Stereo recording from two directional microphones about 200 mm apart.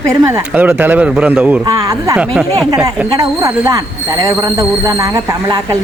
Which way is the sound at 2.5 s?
15° right (ahead or behind).